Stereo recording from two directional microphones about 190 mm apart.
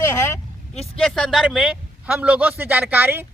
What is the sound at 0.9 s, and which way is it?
A man's voice, 5° left (ahead or behind).